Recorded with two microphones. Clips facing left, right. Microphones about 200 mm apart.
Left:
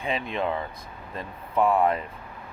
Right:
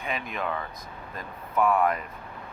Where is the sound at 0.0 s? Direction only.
30° left (ahead or behind).